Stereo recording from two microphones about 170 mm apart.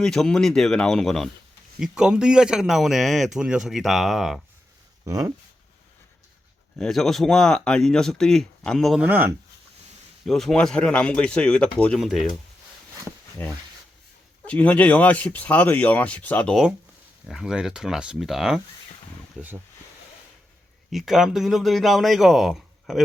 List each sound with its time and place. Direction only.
0.0 s speech: 5° left (ahead or behind)
5.0 s speech: 20° right (ahead or behind)
6.7 s speech: centre (ahead or behind)
9.0 s speech: 10° right (ahead or behind)
10.2 s speech: centre (ahead or behind)
13.4 s speech: 10° left (ahead or behind); by 19.5 s 10° right (ahead or behind)
20.9 s speech: centre (ahead or behind)